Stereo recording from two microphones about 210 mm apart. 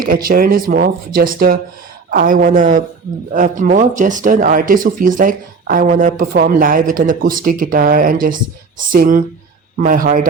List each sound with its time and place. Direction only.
0.0 s speech: 40° right (ahead or behind)